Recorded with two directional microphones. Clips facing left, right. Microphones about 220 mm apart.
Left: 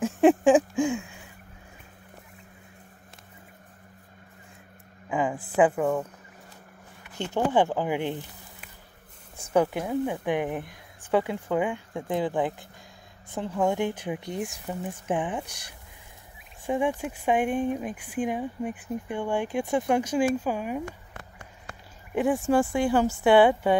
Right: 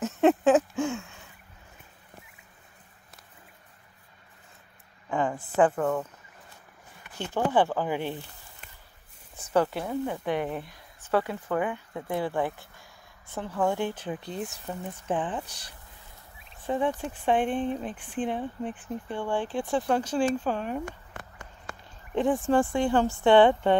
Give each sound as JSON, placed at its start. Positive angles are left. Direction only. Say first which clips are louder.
{"t": 0.0, "sound": "a sound", "louder": "left 3 dB", "side_deg": 15}
{"t": 5.1, "sound": "a woman's voice", "louder": "left 1 dB", "side_deg": 5}
{"t": 7.2, "sound": "speech", "louder": "left 1 dB", "side_deg": 15}
{"t": 9.4, "sound": "speech", "louder": "left 2 dB", "side_deg": 10}
{"t": 22.1, "sound": "speech", "louder": "left 1 dB", "side_deg": 10}